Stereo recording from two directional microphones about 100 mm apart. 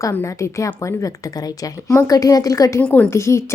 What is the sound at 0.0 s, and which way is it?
A woman's voice, 30° left (ahead or behind).